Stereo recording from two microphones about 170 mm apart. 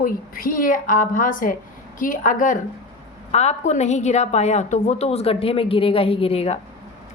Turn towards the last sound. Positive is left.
turn(degrees=35)  # may be behind; listen again after turning